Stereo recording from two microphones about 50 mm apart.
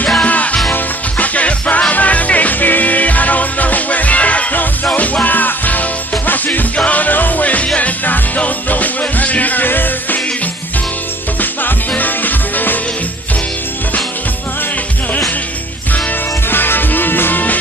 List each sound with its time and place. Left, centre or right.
0.2 s music: left
11.3 s music: left
16.5 s music: left